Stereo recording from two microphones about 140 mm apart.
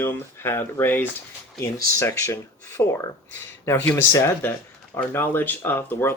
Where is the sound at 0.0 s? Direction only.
15° left (ahead or behind).